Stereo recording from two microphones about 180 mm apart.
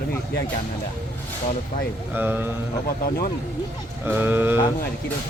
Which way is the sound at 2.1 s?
10° right (ahead or behind).